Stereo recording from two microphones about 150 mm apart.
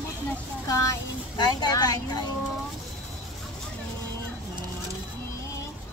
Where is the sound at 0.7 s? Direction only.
20° left (ahead or behind).